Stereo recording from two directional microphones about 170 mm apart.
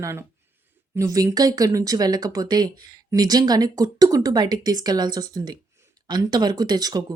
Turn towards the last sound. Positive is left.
turn(degrees=-25)  # may be behind; listen again after turning